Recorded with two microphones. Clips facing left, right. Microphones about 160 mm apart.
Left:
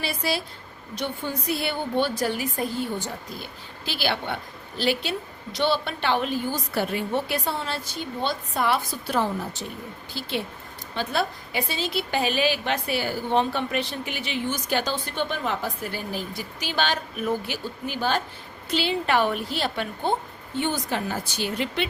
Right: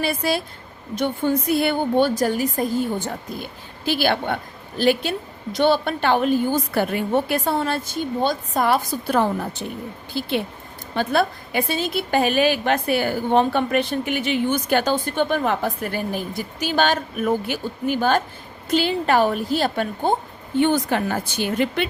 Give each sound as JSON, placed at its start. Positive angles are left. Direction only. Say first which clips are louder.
{"t": 0.0, "sound": "a woman's voice", "louder": "right 5 dB", "side_deg": -50}
{"t": 20.6, "sound": "speech", "louder": "right 8 dB", "side_deg": -55}